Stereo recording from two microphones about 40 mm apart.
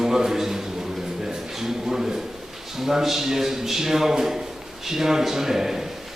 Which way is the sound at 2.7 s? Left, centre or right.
Centre.